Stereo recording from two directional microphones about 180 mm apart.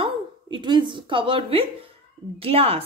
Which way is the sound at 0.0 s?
25° right (ahead or behind).